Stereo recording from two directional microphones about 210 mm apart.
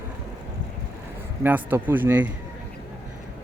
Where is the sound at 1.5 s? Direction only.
10° right (ahead or behind).